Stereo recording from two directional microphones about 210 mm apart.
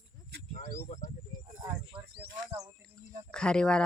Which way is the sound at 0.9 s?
35° left (ahead or behind).